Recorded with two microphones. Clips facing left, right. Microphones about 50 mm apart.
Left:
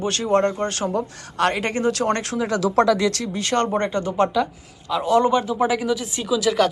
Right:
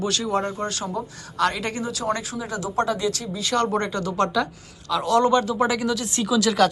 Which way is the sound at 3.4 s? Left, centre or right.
Left.